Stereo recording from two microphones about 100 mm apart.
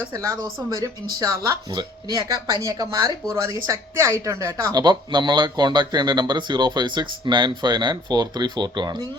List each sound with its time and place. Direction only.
0.1 s speech: 35° right (ahead or behind)
4.8 s speech: 45° right (ahead or behind)